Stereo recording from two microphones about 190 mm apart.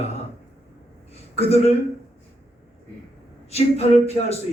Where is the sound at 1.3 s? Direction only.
35° left (ahead or behind).